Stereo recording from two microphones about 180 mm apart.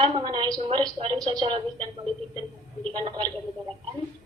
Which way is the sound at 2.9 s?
25° right (ahead or behind).